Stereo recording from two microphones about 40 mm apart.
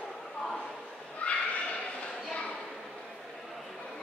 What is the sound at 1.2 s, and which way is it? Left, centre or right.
Neigh, left.